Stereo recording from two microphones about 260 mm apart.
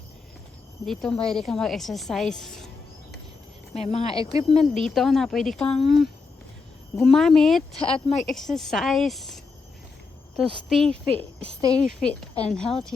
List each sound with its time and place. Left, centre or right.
0.9 s a woman's voice: centre
3.8 s speech: left
4.6 s a woman's voice: centre
7.8 s speech: left
8.2 s a woman's voice: centre
10.7 s a woman's voice: centre